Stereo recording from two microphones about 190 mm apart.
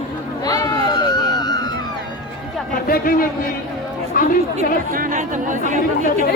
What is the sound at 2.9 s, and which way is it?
A man's voice, 50° left (ahead or behind).